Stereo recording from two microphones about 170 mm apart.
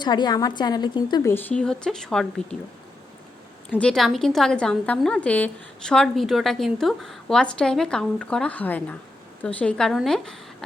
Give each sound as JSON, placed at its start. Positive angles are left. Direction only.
{"t": 0.0, "sound": "a woman's voice", "side_deg": 25}
{"t": 1.3, "sound": "a woman's voice", "side_deg": 10}
{"t": 3.7, "sound": "a woman's voice", "side_deg": 5}